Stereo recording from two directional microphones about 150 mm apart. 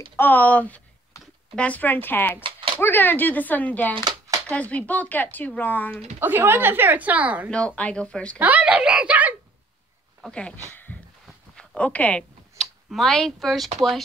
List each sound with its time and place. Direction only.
0.2 s speech: 10° left (ahead or behind)
1.1 s a sound: 20° left (ahead or behind)
1.5 s speech: 10° left (ahead or behind)
3.9 s a sound: 25° right (ahead or behind)
4.5 s speech: 10° left (ahead or behind)
6.1 s speech: 15° right (ahead or behind)
7.4 s speech: 5° left (ahead or behind)
8.4 s speech: 10° right (ahead or behind)
10.2 s speech: 5° left (ahead or behind)
10.7 s a sound: 10° left (ahead or behind)
13.7 s speech: centre (ahead or behind)